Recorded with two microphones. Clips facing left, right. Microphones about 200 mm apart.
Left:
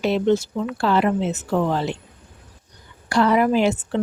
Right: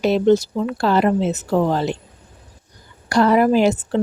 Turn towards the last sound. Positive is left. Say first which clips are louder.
# right 3 dB
turn(degrees=-40)  # may be behind; listen again after turning